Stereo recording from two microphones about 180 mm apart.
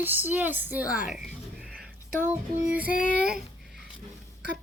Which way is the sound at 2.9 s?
50° left (ahead or behind).